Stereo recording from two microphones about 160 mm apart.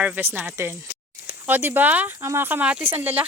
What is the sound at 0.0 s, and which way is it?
Speech, 10° right (ahead or behind).